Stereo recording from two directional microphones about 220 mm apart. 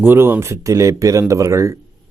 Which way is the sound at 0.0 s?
10° right (ahead or behind).